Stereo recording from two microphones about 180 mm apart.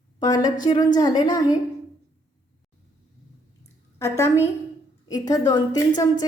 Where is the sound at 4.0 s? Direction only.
15° left (ahead or behind).